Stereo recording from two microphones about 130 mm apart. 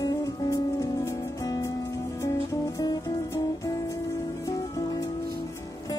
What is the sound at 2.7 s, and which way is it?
Music, 30° left (ahead or behind).